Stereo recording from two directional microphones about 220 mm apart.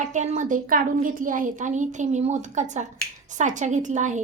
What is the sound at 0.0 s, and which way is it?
A woman's voice, 30° right (ahead or behind).